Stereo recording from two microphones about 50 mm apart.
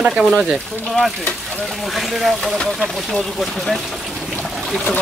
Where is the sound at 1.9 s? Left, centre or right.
Centre.